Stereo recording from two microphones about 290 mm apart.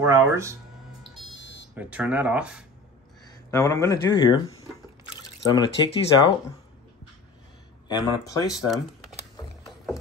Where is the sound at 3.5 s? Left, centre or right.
Centre.